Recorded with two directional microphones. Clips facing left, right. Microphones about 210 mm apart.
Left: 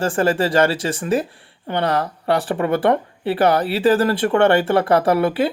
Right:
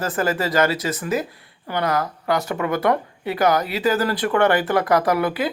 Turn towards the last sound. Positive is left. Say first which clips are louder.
# left 4 dB
turn(degrees=30)  # may be behind; listen again after turning